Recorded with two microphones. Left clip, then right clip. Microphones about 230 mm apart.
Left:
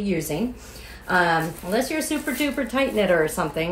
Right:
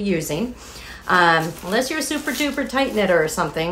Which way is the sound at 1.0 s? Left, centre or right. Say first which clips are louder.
Right 5 dB; centre.